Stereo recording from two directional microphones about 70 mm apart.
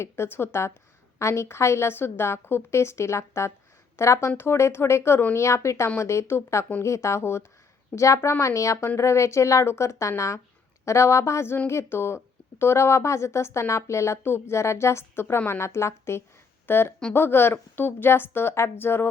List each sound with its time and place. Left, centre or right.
0.0 s a woman's voice: left